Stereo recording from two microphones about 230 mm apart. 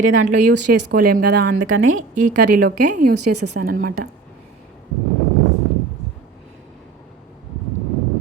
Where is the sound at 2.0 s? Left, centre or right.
Right.